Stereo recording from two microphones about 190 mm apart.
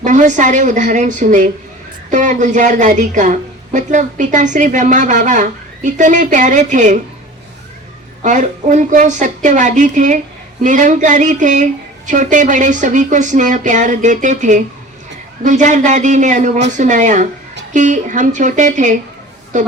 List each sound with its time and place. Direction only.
0.0 s a woman's voice: 40° right (ahead or behind)
8.2 s a woman's voice: 40° right (ahead or behind)